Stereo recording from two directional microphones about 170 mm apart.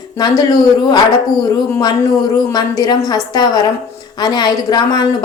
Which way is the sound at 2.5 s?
20° left (ahead or behind).